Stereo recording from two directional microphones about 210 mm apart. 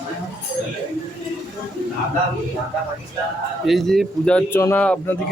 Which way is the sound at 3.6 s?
Centre (ahead or behind).